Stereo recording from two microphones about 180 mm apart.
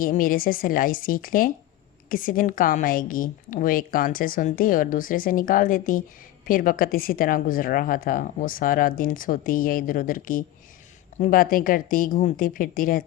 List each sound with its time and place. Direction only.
0.0 s speech: 50° left (ahead or behind)